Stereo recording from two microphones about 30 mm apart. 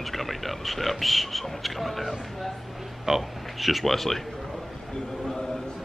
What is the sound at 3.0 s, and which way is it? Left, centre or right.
Speech, centre.